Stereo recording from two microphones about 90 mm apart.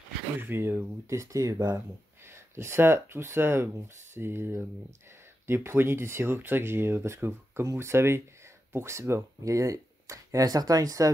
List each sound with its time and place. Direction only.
0.4 s speech: 25° right (ahead or behind); by 1.8 s 40° right (ahead or behind)
2.2 s speech: 30° right (ahead or behind)